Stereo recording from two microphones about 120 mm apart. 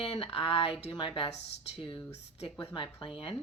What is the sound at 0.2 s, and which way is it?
Speech, 50° left (ahead or behind).